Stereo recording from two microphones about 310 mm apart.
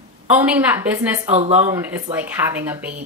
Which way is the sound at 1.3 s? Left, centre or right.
Right.